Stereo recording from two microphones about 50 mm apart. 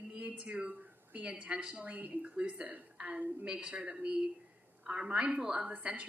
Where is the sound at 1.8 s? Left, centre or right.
Right.